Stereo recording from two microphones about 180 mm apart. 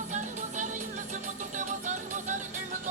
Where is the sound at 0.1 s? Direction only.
40° right (ahead or behind).